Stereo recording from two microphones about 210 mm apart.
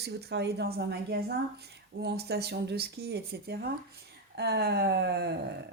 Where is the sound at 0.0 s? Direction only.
50° right (ahead or behind).